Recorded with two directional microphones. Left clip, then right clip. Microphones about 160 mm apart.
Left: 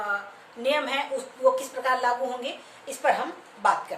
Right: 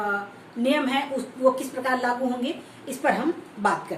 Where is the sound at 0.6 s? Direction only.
10° left (ahead or behind).